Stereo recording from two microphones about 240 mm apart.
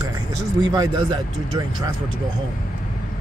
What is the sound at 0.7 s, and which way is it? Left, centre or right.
Speech, centre.